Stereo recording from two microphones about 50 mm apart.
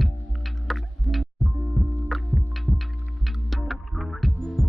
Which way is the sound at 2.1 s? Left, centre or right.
Centre.